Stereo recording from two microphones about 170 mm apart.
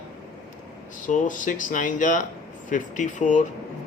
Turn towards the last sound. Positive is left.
turn(degrees=45)  # may be behind; listen again after turning